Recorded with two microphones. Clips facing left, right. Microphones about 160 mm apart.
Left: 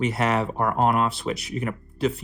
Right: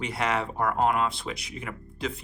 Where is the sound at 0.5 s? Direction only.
45° left (ahead or behind).